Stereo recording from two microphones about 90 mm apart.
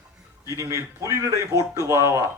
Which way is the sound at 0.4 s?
35° right (ahead or behind).